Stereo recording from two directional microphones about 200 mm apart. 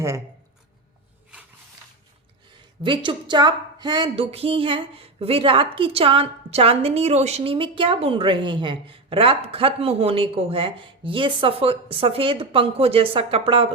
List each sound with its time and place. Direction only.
2.8 s a woman's voice: 25° right (ahead or behind)